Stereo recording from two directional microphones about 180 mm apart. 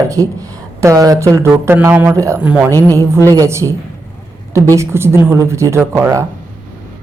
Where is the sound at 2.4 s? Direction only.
5° right (ahead or behind).